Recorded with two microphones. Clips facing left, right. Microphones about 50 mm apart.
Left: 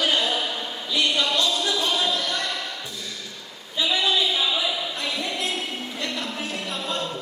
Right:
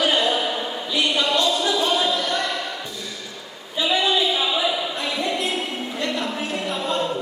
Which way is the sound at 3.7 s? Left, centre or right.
Centre.